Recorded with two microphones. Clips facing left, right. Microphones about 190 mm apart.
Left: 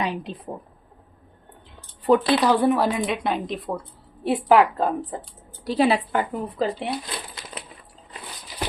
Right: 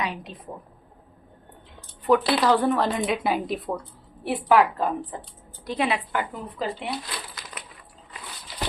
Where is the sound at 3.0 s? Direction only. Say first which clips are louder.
Even; 5° right (ahead or behind).